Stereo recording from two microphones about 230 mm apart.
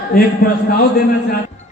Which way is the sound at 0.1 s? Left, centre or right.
Left.